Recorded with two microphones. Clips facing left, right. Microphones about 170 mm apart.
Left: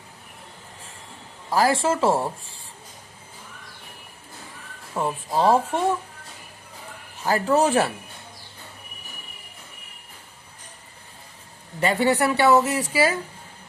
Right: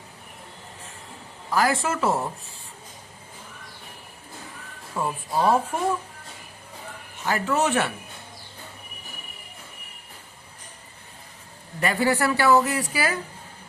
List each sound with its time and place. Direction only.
1.5 s speech: 30° left (ahead or behind)
4.9 s speech: 20° left (ahead or behind)
7.3 s a man's voice: 35° left (ahead or behind)
11.8 s speech: 25° left (ahead or behind)